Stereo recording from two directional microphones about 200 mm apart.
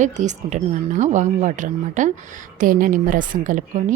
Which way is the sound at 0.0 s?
35° right (ahead or behind).